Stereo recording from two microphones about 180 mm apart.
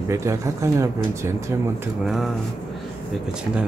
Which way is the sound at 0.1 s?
15° right (ahead or behind).